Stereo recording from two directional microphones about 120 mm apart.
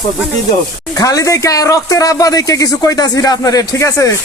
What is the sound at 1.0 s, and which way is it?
Speech, 30° left (ahead or behind).